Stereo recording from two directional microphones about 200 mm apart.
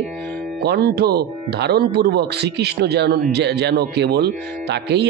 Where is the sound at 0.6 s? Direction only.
55° right (ahead or behind).